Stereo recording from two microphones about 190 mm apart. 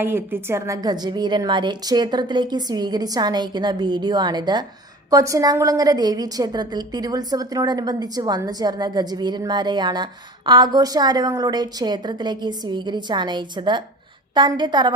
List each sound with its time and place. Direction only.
0.0 s a woman's voice: 10° right (ahead or behind)